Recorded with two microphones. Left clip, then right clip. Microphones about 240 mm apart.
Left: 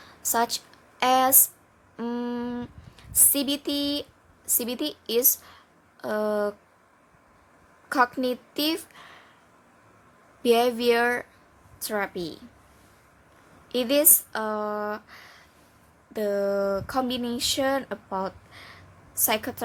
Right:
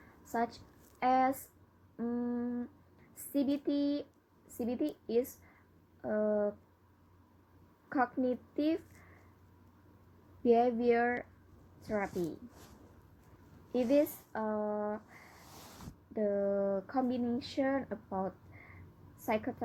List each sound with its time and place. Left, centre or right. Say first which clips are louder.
0.3 s a woman's voice: left 11 dB; left
7.9 s a woman's voice: left 9 dB; left
10.5 s a woman's voice: left 7 dB; left
13.7 s a woman's voice: left 7 dB; left
16.1 s a woman's voice: left 7 dB; left
17.2 s a sound: left 5 dB; left
17.4 s a woman's voice: left 13 dB; left